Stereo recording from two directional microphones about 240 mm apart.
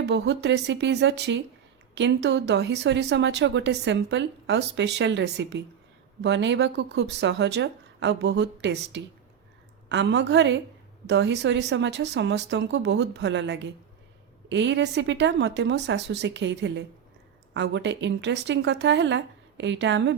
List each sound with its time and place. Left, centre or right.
0.0 s speech: right